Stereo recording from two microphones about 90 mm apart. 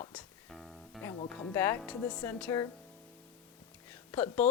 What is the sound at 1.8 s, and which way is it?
Speech, 15° left (ahead or behind).